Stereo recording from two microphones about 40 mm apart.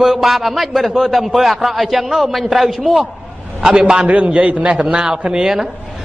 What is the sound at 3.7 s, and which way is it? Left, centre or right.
A man's voice, centre.